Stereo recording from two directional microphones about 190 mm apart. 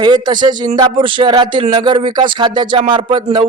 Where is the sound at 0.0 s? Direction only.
20° right (ahead or behind).